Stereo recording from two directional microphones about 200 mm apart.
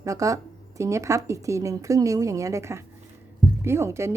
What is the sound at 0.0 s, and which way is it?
Speech, 15° right (ahead or behind).